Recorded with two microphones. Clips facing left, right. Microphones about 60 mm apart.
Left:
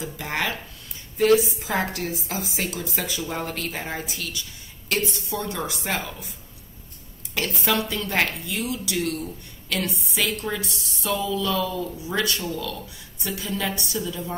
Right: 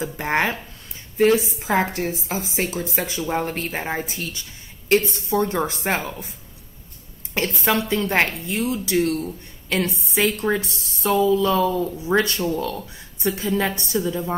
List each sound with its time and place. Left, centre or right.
0.0 s a woman's voice: right
7.3 s a woman's voice: right